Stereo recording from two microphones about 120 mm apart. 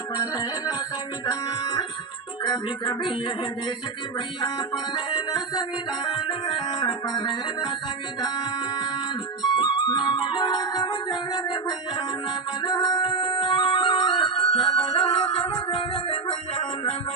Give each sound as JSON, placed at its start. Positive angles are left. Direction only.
{"t": 0.2, "sound": "music", "side_deg": 30}
{"t": 4.4, "sound": "music", "side_deg": 35}
{"t": 9.6, "sound": "music", "side_deg": 40}